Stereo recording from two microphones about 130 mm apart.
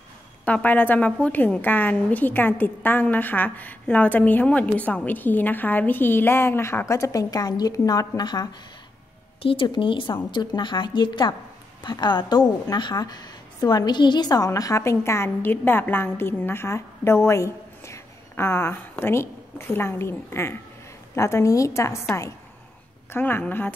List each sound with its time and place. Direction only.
0.5 s a woman's voice: 10° left (ahead or behind); by 8.5 s 30° left (ahead or behind)
9.4 s a woman's voice: 45° left (ahead or behind); by 21.9 s 25° left (ahead or behind)
23.1 s a woman's voice: 15° left (ahead or behind)